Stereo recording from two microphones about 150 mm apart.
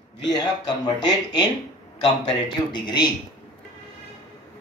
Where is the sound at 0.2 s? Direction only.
25° left (ahead or behind).